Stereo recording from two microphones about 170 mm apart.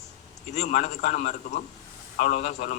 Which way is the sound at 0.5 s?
45° left (ahead or behind).